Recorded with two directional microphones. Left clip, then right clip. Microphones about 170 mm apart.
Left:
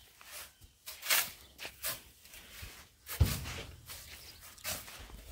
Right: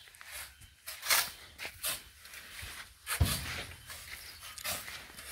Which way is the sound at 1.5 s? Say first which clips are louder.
Right 2 dB; 5° right (ahead or behind).